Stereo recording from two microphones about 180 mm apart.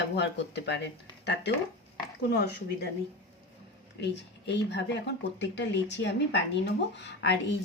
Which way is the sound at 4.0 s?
70° left (ahead or behind).